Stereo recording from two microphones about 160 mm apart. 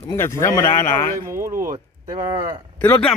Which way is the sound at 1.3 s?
15° right (ahead or behind).